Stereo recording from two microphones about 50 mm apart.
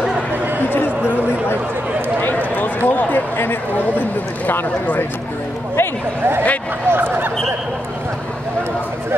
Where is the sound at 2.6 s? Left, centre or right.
Left.